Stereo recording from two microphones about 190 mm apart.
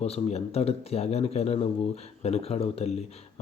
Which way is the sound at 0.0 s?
35° left (ahead or behind).